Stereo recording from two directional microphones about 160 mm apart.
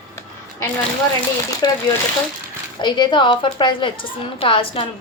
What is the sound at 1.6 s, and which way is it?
A woman's voice, 25° left (ahead or behind).